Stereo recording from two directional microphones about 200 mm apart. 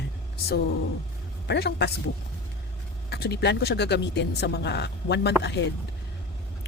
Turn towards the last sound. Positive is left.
turn(degrees=60)  # may be behind; listen again after turning